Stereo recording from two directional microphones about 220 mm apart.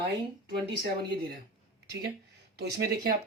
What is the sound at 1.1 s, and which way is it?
Speech, 45° right (ahead or behind).